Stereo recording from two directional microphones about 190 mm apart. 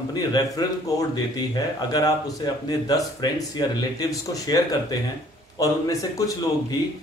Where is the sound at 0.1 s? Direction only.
20° left (ahead or behind).